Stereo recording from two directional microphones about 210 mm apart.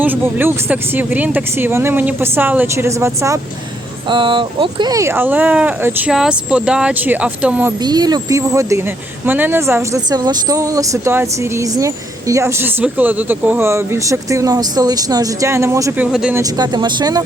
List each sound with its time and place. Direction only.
0.0 s speech: 10° right (ahead or behind)
7.8 s speech: 20° right (ahead or behind)
16.4 s speech: 20° right (ahead or behind)